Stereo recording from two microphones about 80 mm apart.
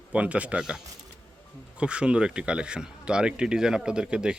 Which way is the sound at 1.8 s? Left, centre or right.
Centre.